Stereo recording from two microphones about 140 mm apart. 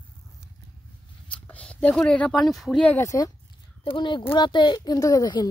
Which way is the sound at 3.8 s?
35° left (ahead or behind).